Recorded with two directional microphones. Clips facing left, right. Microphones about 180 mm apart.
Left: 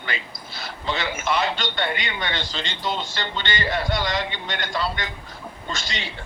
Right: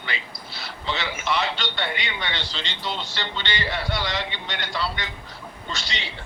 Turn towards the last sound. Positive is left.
turn(degrees=50)  # may be behind; listen again after turning